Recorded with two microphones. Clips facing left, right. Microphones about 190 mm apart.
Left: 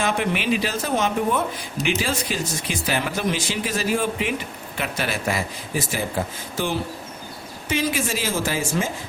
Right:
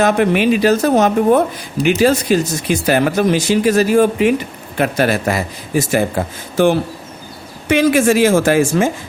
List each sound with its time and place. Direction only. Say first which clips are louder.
0.0 s speech: right 10 dB; 45° right (ahead or behind)
5.7 s speech: right 10 dB; 75° right (ahead or behind)